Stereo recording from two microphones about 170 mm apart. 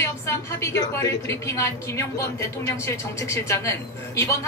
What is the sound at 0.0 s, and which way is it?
A woman's voice, 15° left (ahead or behind).